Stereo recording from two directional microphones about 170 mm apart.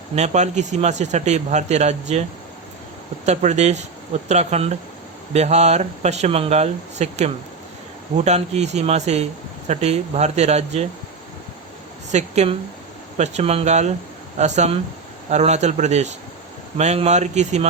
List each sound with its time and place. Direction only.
0.2 s a man's voice: 45° right (ahead or behind)
3.2 s speech: 40° right (ahead or behind)
12.1 s a man's voice: 40° right (ahead or behind)